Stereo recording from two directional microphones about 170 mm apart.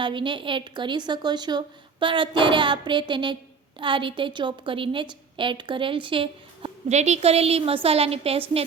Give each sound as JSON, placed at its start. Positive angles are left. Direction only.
{"t": 0.0, "sound": "a woman's voice", "side_deg": -30}